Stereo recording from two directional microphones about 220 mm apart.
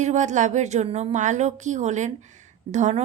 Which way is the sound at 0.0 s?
35° right (ahead or behind).